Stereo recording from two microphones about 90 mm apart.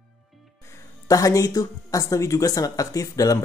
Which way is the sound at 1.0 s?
40° left (ahead or behind).